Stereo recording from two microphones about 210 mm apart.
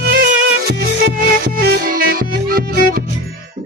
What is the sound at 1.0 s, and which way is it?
Music, 50° right (ahead or behind).